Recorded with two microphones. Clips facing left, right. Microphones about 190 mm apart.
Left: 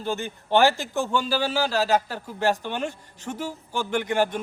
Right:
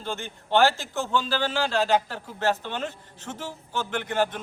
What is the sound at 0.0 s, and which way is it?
A man's voice, 15° left (ahead or behind).